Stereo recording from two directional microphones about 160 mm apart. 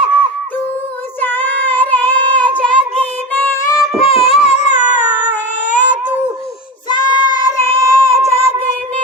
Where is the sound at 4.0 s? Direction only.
40° left (ahead or behind).